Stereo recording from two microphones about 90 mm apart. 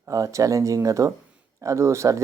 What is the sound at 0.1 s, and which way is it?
Speech, 35° right (ahead or behind).